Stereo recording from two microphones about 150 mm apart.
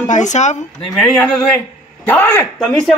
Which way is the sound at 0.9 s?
5° left (ahead or behind).